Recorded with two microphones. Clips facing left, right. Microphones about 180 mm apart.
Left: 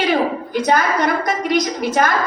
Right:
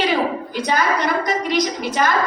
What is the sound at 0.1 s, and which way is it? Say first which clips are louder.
A woman's voice: left 3 dB; 50° left (ahead or behind).